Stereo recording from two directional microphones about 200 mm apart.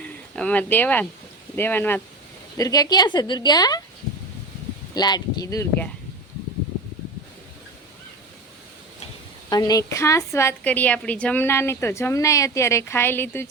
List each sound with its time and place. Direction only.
0.0 s a woman's voice: 5° left (ahead or behind)
4.9 s a woman's voice: 20° left (ahead or behind)
9.5 s a woman's voice: 20° left (ahead or behind)